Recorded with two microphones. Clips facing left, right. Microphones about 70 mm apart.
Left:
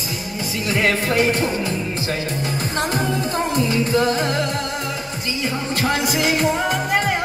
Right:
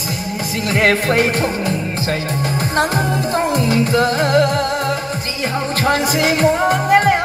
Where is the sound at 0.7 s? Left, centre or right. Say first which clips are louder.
Right 4 dB; right.